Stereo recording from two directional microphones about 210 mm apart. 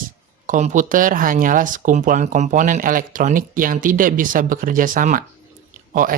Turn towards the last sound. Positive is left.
turn(degrees=-40)  # may be behind; listen again after turning